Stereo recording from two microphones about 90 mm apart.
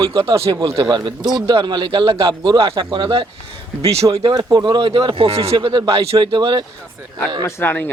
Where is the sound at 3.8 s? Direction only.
40° right (ahead or behind); by 6.3 s 90° right.